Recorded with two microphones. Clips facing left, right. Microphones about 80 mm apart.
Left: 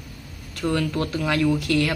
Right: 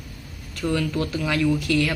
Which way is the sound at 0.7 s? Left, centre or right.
Left.